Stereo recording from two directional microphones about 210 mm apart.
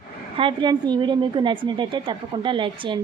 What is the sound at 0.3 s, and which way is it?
A woman's voice, 25° right (ahead or behind).